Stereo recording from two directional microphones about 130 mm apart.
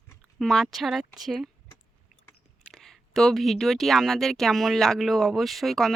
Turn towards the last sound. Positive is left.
turn(degrees=0)  # may be behind; listen again after turning